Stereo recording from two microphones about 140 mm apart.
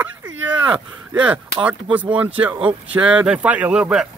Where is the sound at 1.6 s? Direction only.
10° right (ahead or behind).